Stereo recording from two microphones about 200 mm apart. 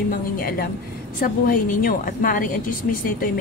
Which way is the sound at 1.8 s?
45° left (ahead or behind).